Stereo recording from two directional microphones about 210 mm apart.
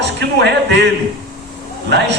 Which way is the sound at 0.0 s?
55° right (ahead or behind).